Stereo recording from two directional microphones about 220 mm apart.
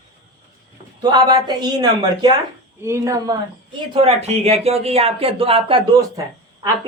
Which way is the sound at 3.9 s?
30° right (ahead or behind).